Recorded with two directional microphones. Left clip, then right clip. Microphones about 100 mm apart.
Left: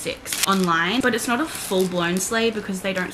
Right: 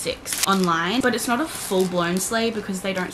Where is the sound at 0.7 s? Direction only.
5° right (ahead or behind).